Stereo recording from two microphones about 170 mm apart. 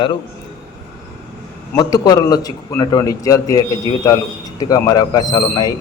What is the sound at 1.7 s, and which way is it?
A man's voice, 20° left (ahead or behind).